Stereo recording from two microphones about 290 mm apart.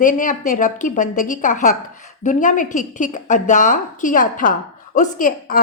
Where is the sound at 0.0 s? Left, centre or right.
Left.